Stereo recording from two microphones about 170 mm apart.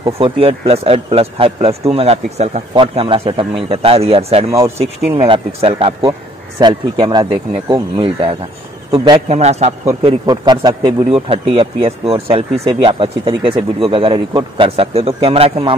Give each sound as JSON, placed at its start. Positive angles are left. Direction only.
{"t": 0.0, "sound": "speech", "side_deg": -35}
{"t": 4.5, "sound": "speech", "side_deg": -20}
{"t": 4.7, "sound": "speech", "side_deg": -35}
{"t": 10.2, "sound": "speech", "side_deg": -25}